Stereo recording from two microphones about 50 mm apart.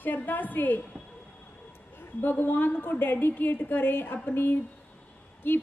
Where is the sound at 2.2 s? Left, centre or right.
Left.